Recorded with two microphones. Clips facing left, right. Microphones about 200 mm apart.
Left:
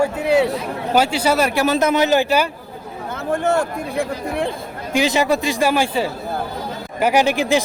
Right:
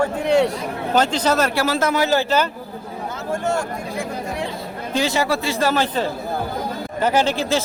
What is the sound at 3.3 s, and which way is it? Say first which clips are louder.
Speech: left 4 dB; 60° left (ahead or behind).